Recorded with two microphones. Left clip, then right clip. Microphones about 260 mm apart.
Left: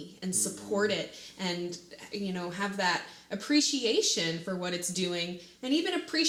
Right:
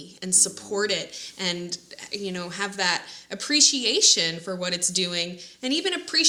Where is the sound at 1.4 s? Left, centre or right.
Right.